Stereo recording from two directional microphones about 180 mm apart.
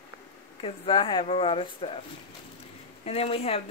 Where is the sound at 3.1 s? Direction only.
35° left (ahead or behind).